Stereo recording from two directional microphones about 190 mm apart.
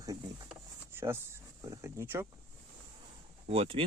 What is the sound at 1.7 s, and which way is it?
Speech, 15° right (ahead or behind).